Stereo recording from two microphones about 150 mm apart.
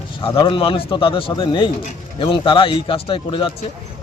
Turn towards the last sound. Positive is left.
turn(degrees=35)  # may be behind; listen again after turning